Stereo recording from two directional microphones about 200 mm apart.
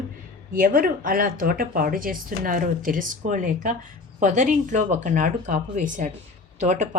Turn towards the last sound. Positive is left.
turn(degrees=-35)  # may be behind; listen again after turning